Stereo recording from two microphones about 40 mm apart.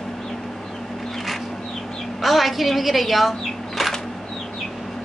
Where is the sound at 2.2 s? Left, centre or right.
Centre.